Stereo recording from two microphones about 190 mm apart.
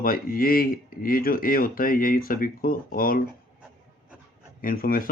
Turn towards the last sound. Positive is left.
turn(degrees=50)  # may be behind; listen again after turning